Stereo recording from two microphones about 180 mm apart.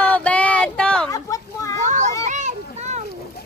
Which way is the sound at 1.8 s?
45° right (ahead or behind).